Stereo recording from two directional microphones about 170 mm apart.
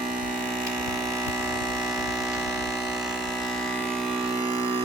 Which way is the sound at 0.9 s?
20° right (ahead or behind).